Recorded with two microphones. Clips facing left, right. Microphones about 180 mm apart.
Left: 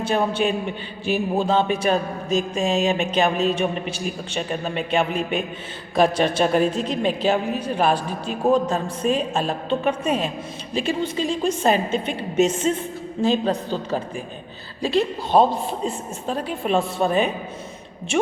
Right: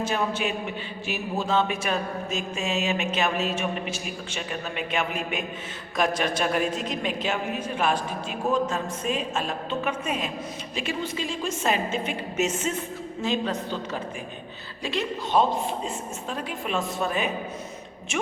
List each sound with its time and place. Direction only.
0.0 s a man's voice: 30° left (ahead or behind)